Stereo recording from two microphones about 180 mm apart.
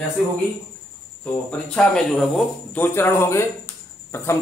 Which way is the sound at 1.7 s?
5° left (ahead or behind).